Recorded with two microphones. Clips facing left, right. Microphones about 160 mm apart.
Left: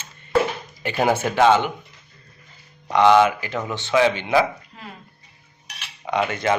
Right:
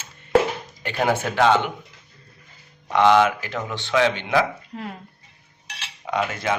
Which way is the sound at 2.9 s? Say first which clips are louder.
Left 2 dB; centre (ahead or behind).